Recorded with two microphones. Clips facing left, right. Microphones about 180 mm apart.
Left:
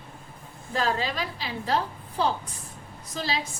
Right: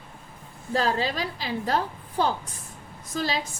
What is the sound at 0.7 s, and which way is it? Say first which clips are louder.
A woman's voice: right 2 dB; 40° right (ahead or behind).